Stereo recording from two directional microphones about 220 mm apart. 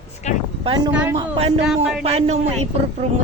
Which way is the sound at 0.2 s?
30° left (ahead or behind).